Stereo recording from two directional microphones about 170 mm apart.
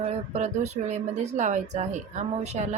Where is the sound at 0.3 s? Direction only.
40° right (ahead or behind).